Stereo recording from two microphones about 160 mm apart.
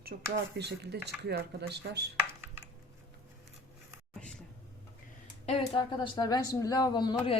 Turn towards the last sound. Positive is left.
turn(degrees=30)  # may be behind; listen again after turning